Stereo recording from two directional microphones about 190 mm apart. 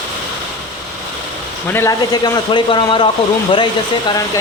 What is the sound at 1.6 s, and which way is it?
Speech, 15° left (ahead or behind).